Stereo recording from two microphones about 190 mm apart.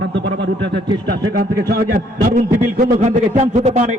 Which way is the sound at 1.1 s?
55° right (ahead or behind).